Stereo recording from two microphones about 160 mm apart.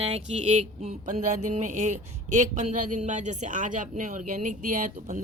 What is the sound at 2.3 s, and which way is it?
A man's voice, 50° right (ahead or behind).